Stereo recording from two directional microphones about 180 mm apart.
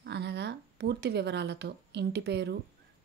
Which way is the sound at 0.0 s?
70° right (ahead or behind).